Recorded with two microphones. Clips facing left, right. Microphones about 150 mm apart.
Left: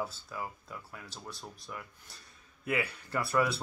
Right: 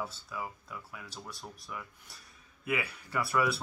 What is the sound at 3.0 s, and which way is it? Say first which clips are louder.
Speech: even; 5° right (ahead or behind).